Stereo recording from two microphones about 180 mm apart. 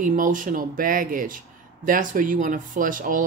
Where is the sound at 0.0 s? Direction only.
45° right (ahead or behind).